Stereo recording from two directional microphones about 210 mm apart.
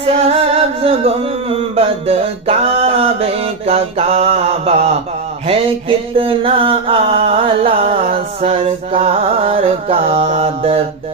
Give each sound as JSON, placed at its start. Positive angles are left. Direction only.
{"t": 0.0, "sound": "music", "side_deg": -30}
{"t": 6.1, "sound": "music", "side_deg": -25}